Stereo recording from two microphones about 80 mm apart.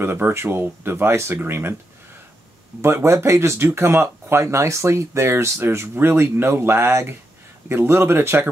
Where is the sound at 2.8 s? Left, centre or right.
Right.